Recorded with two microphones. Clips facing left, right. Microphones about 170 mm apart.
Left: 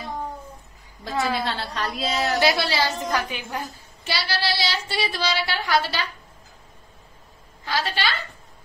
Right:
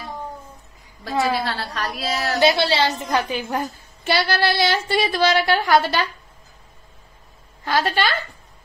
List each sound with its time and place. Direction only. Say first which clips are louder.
1.4 s a woman's voice: right 1 dB; 25° left (ahead or behind)
2.4 s a woman's voice: right 8 dB; 25° right (ahead or behind)
3.4 s female singing: right 6 dB; 55° right (ahead or behind)
7.6 s female singing: right 5 dB; 50° right (ahead or behind)